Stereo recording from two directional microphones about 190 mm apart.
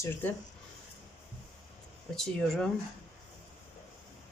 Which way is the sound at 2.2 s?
Centre (ahead or behind).